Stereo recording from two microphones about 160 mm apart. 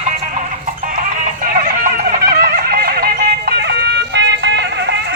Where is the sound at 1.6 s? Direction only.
60° right (ahead or behind).